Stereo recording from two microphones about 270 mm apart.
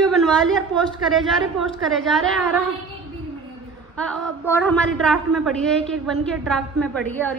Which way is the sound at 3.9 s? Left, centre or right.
Centre.